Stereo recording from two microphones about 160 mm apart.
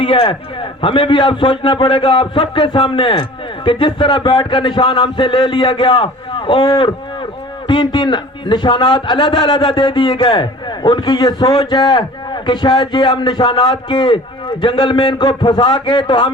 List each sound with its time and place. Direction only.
0.0 s a man's voice: 35° left (ahead or behind)